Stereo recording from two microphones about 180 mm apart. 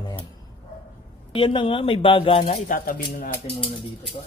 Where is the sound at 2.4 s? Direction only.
45° left (ahead or behind).